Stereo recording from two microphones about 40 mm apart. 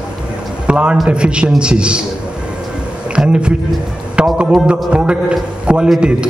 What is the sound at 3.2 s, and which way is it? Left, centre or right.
Speech, right.